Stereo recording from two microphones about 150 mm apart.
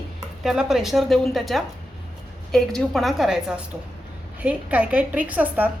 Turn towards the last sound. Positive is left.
turn(degrees=-10)  # may be behind; listen again after turning